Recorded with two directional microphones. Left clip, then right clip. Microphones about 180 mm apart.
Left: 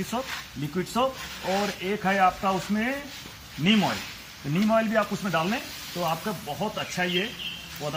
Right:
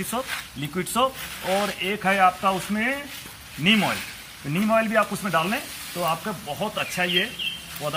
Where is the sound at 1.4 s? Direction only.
25° right (ahead or behind).